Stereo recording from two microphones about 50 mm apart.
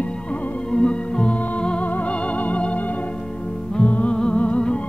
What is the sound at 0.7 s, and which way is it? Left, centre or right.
Music, centre.